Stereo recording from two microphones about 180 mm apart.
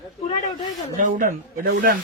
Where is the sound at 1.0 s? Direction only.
50° right (ahead or behind).